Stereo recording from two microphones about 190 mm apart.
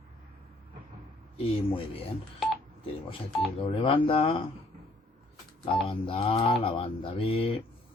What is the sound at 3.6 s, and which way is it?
Speech, 30° left (ahead or behind).